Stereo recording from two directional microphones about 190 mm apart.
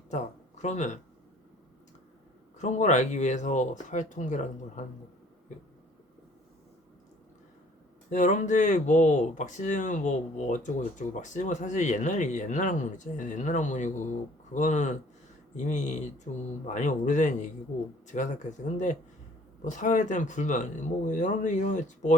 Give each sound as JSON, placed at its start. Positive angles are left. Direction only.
{"t": 0.1, "sound": "speech", "side_deg": 40}
{"t": 2.6, "sound": "speech", "side_deg": 40}
{"t": 8.1, "sound": "speech", "side_deg": 40}
{"t": 19.6, "sound": "speech", "side_deg": 40}